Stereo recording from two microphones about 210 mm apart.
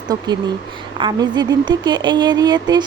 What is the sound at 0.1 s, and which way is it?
Speech, 20° right (ahead or behind).